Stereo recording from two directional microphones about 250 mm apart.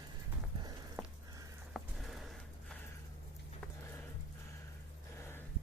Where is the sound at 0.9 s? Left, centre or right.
Centre.